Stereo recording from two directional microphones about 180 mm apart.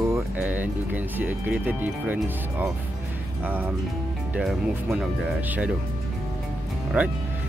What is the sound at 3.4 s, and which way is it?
Speech, 10° right (ahead or behind).